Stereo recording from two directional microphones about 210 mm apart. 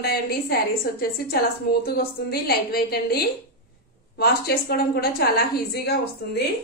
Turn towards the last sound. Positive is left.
turn(degrees=50)  # may be behind; listen again after turning